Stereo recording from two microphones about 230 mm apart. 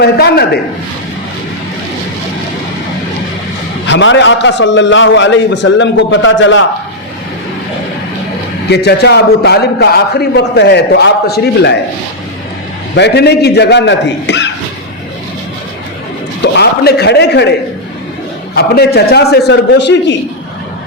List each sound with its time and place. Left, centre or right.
0.0 s a man's voice: left
3.8 s a man's voice: left
8.7 s a man's voice: left
13.0 s a man's voice: left
16.4 s a man's voice: left
18.5 s a man's voice: left